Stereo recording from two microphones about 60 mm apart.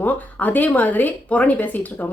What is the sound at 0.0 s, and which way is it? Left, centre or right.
Speech, left.